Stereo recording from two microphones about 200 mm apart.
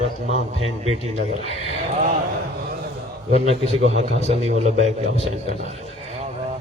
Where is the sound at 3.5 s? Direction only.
30° right (ahead or behind).